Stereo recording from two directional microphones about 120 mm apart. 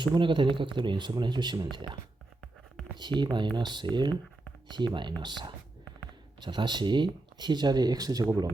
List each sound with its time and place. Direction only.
0.0 s speech: 40° right (ahead or behind)
3.2 s speech: 40° right (ahead or behind)